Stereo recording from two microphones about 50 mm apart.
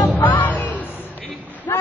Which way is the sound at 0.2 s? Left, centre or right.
Left.